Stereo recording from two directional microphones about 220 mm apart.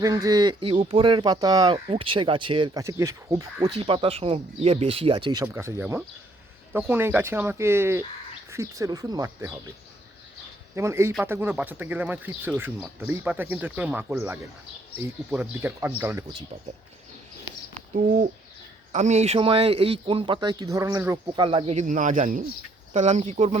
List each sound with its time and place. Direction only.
0.0 s speech: 15° right (ahead or behind)
10.8 s speech: 10° right (ahead or behind)
17.7 s bird: 35° right (ahead or behind)
18.9 s speech: 30° right (ahead or behind)